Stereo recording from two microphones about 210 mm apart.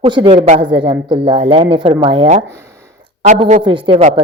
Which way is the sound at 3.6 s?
25° right (ahead or behind).